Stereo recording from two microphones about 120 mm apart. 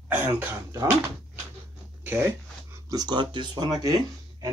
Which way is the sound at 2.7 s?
30° right (ahead or behind).